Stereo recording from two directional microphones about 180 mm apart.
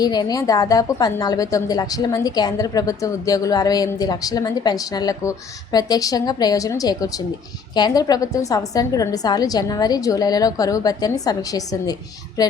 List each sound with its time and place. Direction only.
0.0 s a woman's voice: 20° left (ahead or behind)